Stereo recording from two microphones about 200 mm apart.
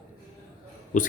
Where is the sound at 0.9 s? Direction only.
40° left (ahead or behind).